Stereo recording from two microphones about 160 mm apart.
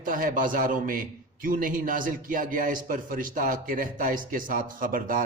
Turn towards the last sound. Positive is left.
turn(degrees=-60)  # may be behind; listen again after turning